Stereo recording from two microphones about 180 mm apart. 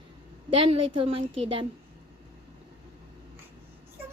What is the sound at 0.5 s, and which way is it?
Child singing, 30° right (ahead or behind).